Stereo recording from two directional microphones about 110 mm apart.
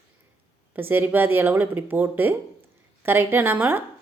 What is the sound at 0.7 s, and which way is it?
Speech, 15° right (ahead or behind).